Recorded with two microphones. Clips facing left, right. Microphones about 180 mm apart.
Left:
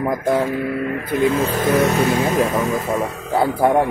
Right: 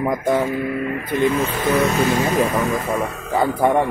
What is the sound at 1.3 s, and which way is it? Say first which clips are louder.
Speech: left 2 dB; 40° left (ahead or behind).